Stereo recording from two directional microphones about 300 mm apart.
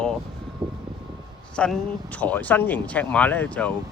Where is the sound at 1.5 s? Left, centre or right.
Centre.